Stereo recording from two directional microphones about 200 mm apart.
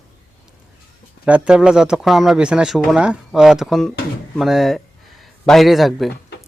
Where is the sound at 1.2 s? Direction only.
5° right (ahead or behind).